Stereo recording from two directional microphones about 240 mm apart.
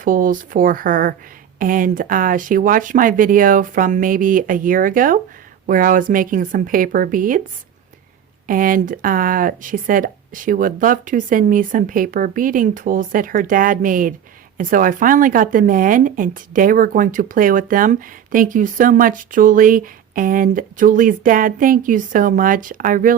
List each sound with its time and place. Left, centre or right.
0.0 s speech: right
8.4 s speech: right